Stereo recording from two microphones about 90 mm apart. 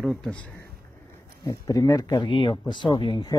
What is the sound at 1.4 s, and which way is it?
Speech, 40° left (ahead or behind).